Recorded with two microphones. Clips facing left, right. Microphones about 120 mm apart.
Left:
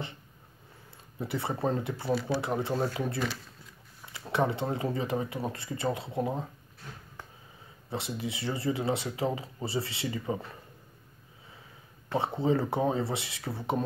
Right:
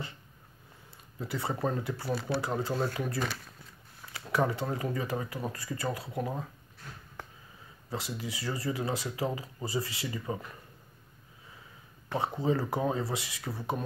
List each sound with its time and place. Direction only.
1.2 s speech: 25° left (ahead or behind)
4.2 s speech: 25° left (ahead or behind)
7.9 s speech: 25° left (ahead or behind)
12.1 s speech: 25° left (ahead or behind)